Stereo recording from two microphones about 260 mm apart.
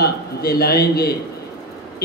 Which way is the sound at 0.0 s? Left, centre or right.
Left.